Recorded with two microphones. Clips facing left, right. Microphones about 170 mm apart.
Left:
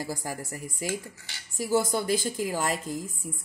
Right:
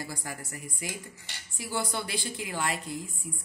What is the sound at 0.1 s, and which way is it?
A woman's voice, 45° left (ahead or behind).